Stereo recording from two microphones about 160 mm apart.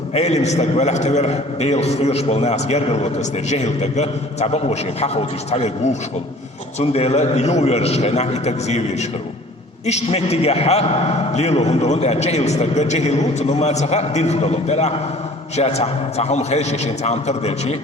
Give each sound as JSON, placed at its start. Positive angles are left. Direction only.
{"t": 0.1, "sound": "a man's voice", "side_deg": 45}